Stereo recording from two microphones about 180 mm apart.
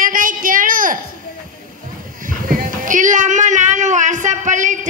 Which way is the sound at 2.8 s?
45° right (ahead or behind).